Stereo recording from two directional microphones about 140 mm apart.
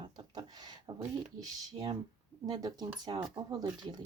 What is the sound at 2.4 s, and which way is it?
Speech, 30° right (ahead or behind).